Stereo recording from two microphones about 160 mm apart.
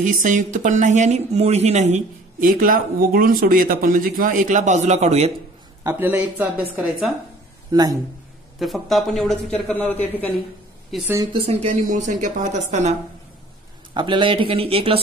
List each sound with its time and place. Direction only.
0.0 s speech: 55° right (ahead or behind)
5.9 s a man's voice: 10° right (ahead or behind)
7.7 s speech: 25° right (ahead or behind)
8.5 s a man's voice: centre (ahead or behind)
11.3 s speech: 40° right (ahead or behind)
13.9 s speech: 30° right (ahead or behind)